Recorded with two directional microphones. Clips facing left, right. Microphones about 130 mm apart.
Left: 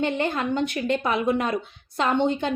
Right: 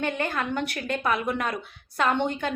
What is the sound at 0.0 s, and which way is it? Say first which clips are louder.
A woman's voice: left 3 dB; 25° left (ahead or behind).